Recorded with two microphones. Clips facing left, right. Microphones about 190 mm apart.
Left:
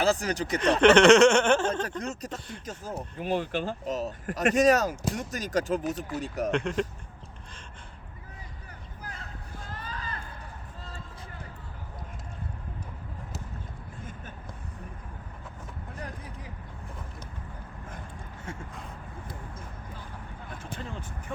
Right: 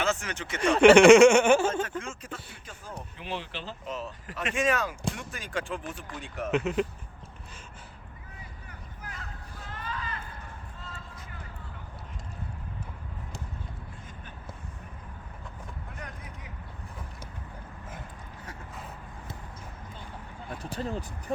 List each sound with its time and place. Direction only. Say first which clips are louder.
0.0 s speech: left 5 dB; 35° left (ahead or behind)
0.6 s speech: right 2 dB; 10° right (ahead or behind)
2.0 s speech: left 3 dB; 40° left (ahead or behind)
6.5 s speech: right 3 dB; 5° right (ahead or behind)
9.7 s a sound: right 3 dB; 35° left (ahead or behind)
16.0 s vehicle: left 3 dB; 35° left (ahead or behind)
20.6 s a sound: right 6 dB; 35° right (ahead or behind)